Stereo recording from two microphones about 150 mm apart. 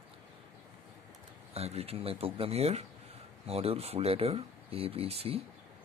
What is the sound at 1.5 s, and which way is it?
Speech, 45° right (ahead or behind).